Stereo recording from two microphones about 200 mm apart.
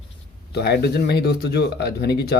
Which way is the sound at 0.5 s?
55° left (ahead or behind).